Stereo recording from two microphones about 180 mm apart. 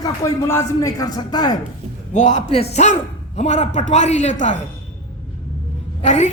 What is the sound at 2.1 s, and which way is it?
A woman's voice, 40° left (ahead or behind).